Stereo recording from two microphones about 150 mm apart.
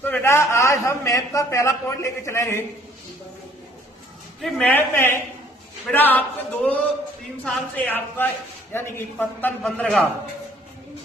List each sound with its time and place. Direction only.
0.0 s a man's voice: 15° left (ahead or behind)
4.4 s a man's voice: 10° left (ahead or behind)